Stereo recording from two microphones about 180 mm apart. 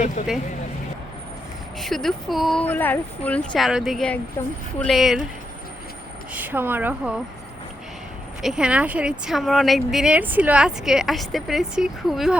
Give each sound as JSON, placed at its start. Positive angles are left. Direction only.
{"t": 0.2, "sound": "speech", "side_deg": 40}
{"t": 1.8, "sound": "speech", "side_deg": 0}
{"t": 6.3, "sound": "a woman's voice", "side_deg": -10}
{"t": 8.4, "sound": "speech", "side_deg": -5}